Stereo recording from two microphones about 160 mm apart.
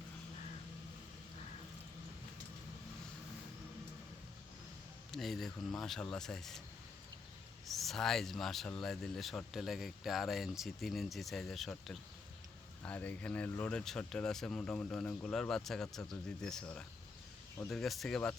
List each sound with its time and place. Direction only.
5.1 s speech: centre (ahead or behind)
7.8 s speech: centre (ahead or behind)